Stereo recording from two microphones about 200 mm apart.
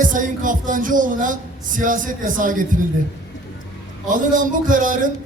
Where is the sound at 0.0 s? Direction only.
40° right (ahead or behind).